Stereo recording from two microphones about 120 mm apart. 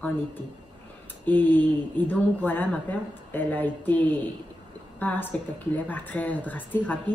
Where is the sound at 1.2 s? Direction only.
15° left (ahead or behind).